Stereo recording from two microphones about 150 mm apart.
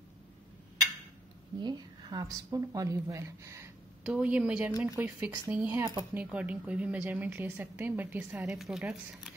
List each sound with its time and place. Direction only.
1.6 s a woman's voice: 30° right (ahead or behind)
4.0 s a woman's voice: 10° right (ahead or behind)